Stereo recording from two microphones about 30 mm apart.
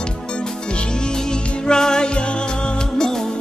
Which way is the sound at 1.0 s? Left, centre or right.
Left.